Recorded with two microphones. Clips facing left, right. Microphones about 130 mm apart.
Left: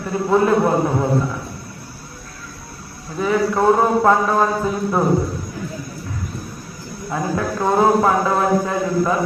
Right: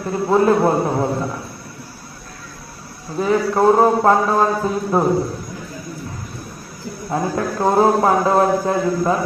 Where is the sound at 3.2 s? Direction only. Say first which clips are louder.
Right 1 dB; 30° right (ahead or behind).